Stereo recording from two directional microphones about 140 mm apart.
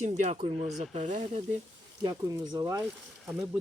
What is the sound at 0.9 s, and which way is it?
Speech, 55° right (ahead or behind).